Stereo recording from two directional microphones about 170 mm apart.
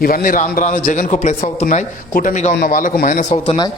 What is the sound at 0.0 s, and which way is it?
A man's voice, 55° left (ahead or behind).